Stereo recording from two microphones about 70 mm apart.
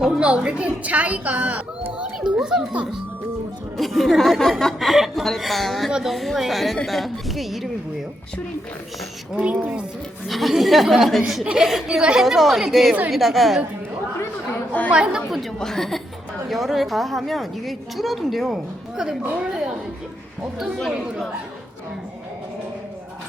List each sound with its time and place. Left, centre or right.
0.2 s a woman's voice: centre
2.3 s a woman's voice: centre
3.8 s a woman's voice: centre
9.3 s a woman's voice: centre
10.2 s a woman's voice: centre
14.5 s speech: left
14.8 s a woman's voice: centre
15.4 s a woman's voice: centre
19.2 s a woman's voice: centre